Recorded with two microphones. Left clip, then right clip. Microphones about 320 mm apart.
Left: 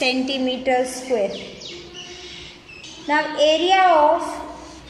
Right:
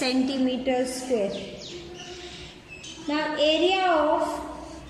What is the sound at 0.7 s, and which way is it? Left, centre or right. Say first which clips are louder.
Speech: left 8 dB; left.